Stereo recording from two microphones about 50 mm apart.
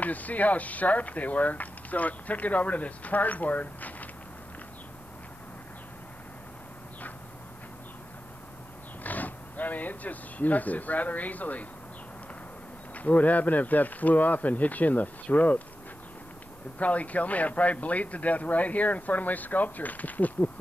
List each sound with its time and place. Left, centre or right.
0.0 s speech: left
9.0 s speech: left
12.9 s speech: left
16.7 s speech: left